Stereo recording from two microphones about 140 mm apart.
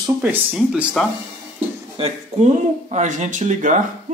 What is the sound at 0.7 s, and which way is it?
Speech, centre (ahead or behind).